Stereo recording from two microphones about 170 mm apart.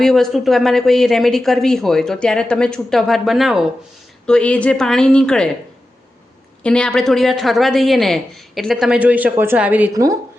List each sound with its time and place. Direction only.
0.0 s speech: centre (ahead or behind)
6.6 s speech: 5° left (ahead or behind)
9.9 s a woman's voice: 20° right (ahead or behind)